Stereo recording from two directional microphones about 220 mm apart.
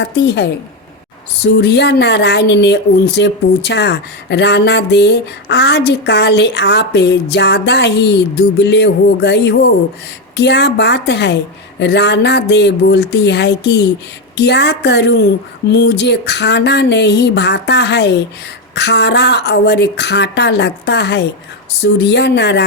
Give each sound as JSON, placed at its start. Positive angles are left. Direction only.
{"t": 0.0, "sound": "speech", "side_deg": 50}